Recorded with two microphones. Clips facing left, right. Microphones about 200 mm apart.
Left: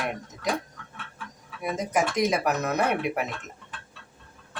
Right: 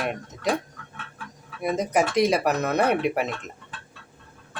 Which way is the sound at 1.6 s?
35° right (ahead or behind).